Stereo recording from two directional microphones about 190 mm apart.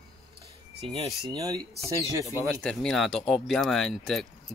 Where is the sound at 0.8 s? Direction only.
25° right (ahead or behind).